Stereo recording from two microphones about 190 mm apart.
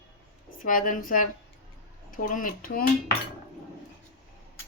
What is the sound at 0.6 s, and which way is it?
Speech, 45° left (ahead or behind).